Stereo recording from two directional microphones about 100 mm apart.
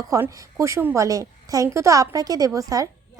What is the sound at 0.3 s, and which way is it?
A woman's voice, 35° right (ahead or behind).